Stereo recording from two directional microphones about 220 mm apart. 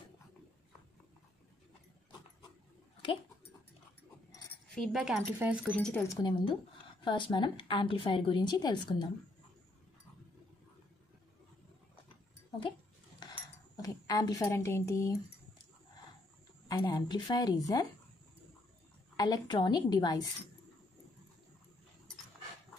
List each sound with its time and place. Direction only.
4.7 s speech: centre (ahead or behind)
6.0 s a woman's voice: 20° left (ahead or behind)
13.2 s a sound: 15° left (ahead or behind)
16.6 s speech: 15° left (ahead or behind)
19.1 s a woman's voice: 20° left (ahead or behind)